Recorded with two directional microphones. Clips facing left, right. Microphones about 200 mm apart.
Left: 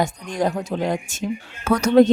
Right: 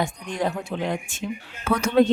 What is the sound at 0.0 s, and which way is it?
Speech, 40° left (ahead or behind).